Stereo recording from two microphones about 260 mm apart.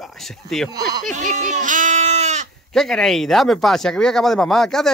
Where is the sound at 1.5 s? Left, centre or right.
Right.